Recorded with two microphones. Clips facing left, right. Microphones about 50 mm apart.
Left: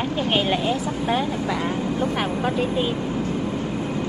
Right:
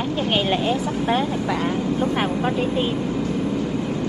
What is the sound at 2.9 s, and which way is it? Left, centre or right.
Vehicle, left.